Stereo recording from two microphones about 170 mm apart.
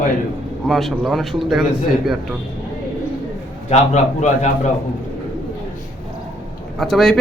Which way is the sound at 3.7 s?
45° left (ahead or behind).